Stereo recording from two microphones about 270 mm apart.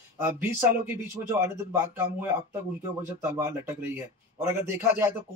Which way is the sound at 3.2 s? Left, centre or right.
Centre.